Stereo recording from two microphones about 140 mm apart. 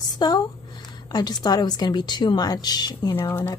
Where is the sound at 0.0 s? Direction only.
30° left (ahead or behind).